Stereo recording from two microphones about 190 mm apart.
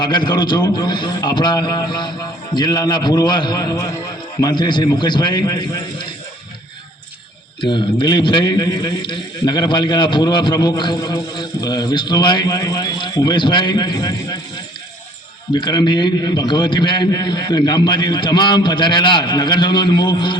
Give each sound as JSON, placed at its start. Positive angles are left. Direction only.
{"t": 0.0, "sound": "a man's voice", "side_deg": 25}
{"t": 7.6, "sound": "a man's voice", "side_deg": 25}
{"t": 15.5, "sound": "a man's voice", "side_deg": 20}